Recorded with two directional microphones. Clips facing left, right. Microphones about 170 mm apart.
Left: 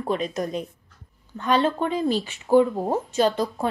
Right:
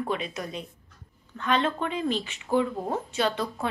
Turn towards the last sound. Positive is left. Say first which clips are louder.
# left 5 dB
turn(degrees=40)  # may be behind; listen again after turning